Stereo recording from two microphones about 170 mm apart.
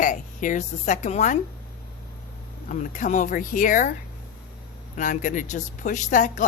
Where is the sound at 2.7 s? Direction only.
45° left (ahead or behind).